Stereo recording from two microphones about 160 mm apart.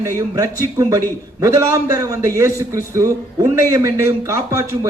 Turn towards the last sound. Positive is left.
turn(degrees=-15)  # may be behind; listen again after turning